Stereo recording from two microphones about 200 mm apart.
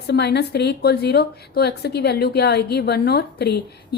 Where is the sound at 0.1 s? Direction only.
55° left (ahead or behind).